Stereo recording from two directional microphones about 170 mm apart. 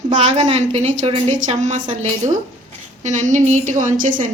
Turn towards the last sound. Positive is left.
turn(degrees=-50)  # may be behind; listen again after turning